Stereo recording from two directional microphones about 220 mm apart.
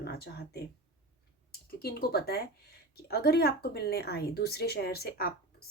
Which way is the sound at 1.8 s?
45° left (ahead or behind).